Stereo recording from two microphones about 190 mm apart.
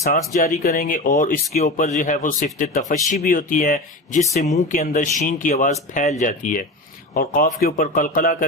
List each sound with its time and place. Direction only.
0.0 s a man's voice: 40° left (ahead or behind)